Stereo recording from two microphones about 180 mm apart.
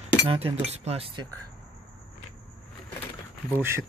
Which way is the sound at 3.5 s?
10° right (ahead or behind).